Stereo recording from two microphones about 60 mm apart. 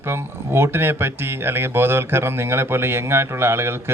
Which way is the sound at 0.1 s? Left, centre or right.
Right.